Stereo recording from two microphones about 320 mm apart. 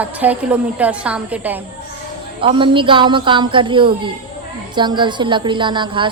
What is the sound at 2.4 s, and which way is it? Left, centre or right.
A woman's voice, centre.